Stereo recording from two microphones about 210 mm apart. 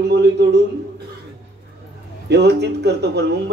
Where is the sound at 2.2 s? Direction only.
55° right (ahead or behind).